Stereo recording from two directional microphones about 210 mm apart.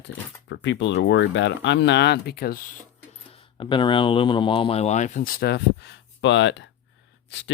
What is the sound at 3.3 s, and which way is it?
Speech, 25° left (ahead or behind).